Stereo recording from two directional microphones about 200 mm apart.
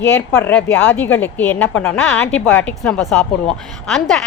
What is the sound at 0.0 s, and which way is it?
Speech, 10° left (ahead or behind).